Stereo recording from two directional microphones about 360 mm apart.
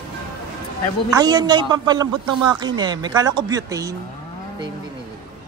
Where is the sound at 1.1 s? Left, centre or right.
Centre.